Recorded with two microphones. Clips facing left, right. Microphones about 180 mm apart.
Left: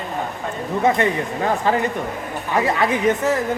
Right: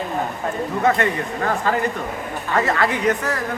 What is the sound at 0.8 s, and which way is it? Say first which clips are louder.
Speech: left 2 dB; 15° left (ahead or behind).